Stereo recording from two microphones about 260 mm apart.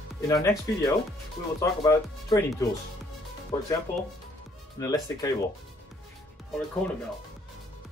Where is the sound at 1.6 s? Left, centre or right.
Centre.